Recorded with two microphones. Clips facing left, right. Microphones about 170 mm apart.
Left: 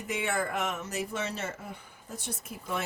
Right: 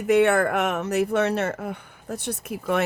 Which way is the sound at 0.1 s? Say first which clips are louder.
Right 13 dB; 65° right (ahead or behind).